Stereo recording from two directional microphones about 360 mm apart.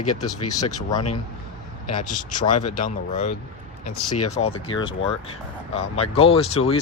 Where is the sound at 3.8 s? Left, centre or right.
Left.